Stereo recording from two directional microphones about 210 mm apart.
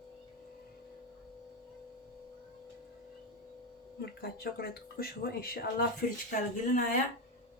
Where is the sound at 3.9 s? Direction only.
50° left (ahead or behind).